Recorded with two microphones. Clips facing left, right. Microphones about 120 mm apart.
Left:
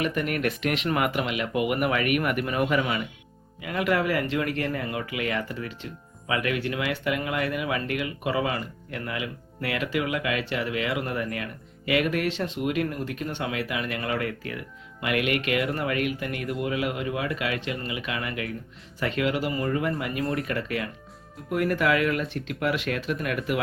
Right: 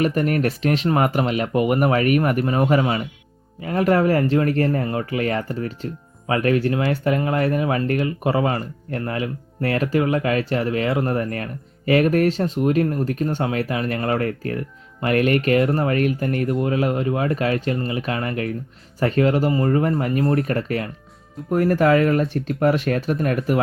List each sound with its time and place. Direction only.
0.0 s speech: 40° right (ahead or behind)